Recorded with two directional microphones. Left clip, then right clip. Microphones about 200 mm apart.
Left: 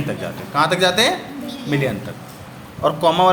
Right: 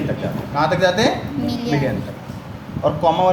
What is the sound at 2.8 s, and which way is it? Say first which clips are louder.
Speech: left 1 dB; 45° left (ahead or behind).